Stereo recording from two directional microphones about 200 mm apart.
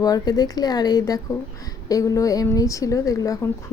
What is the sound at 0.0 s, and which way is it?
Speech, 20° left (ahead or behind).